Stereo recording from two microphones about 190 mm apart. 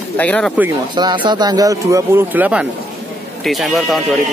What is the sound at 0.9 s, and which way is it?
A man's voice, 25° right (ahead or behind).